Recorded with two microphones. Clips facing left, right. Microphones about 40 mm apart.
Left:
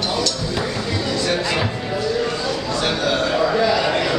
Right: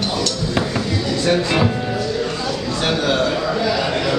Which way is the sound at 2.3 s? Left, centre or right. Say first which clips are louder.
Even; centre.